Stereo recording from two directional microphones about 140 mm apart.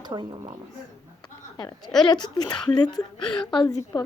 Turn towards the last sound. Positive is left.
turn(degrees=30)  # may be behind; listen again after turning